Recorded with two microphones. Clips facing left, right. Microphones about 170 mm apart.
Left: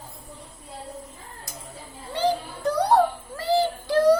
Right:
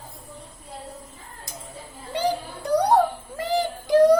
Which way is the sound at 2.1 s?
15° right (ahead or behind).